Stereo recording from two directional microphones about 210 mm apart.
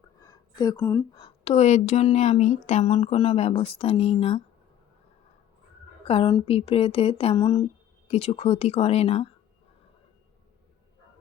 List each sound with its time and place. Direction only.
0.2 s a woman's voice: 20° left (ahead or behind)
1.2 s speech: 30° left (ahead or behind)
6.1 s speech: 25° left (ahead or behind)